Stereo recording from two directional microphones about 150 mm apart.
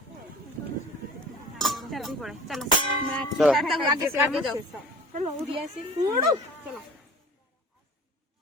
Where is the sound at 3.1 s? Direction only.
5° left (ahead or behind).